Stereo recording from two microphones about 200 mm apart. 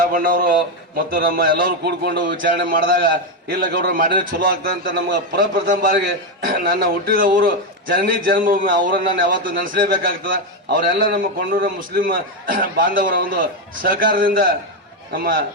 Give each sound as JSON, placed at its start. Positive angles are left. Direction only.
{"t": 0.0, "sound": "a man's voice", "side_deg": -45}